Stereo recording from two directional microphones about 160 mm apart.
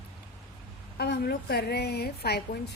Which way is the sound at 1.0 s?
90° left.